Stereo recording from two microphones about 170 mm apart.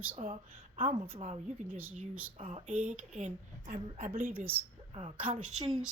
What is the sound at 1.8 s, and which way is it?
Speech, 10° right (ahead or behind).